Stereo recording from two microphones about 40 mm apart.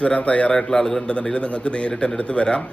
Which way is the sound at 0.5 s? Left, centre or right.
Centre.